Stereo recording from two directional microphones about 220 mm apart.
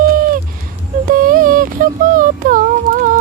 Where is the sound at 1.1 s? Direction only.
40° right (ahead or behind).